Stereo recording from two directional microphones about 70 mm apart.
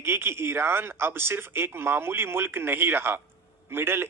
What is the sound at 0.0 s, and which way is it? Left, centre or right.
Speech, right.